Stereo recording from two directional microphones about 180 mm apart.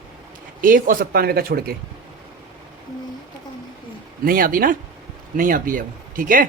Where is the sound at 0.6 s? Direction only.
50° right (ahead or behind).